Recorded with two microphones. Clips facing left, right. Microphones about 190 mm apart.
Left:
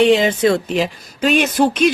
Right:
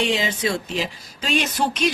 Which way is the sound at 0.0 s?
60° left (ahead or behind).